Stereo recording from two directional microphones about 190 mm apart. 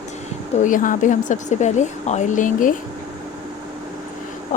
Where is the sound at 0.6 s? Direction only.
45° left (ahead or behind).